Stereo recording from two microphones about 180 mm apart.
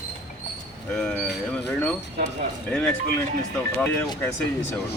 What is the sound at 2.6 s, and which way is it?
Speech, 5° left (ahead or behind).